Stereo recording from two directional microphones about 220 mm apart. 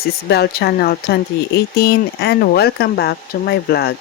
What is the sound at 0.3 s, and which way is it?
Speech, 45° left (ahead or behind).